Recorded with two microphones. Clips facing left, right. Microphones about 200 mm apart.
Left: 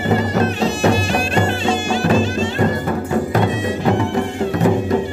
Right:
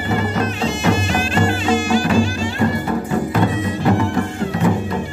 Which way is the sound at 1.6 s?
25° left (ahead or behind).